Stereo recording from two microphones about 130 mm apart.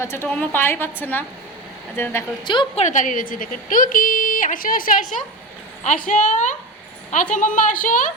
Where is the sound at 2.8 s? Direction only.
70° left (ahead or behind); by 8.1 s 90° left.